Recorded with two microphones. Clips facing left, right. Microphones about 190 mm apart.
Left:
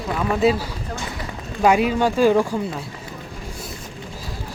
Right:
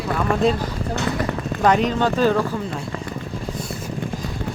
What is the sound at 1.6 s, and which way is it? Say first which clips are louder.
Speech: left 1 dB; 10° left (ahead or behind).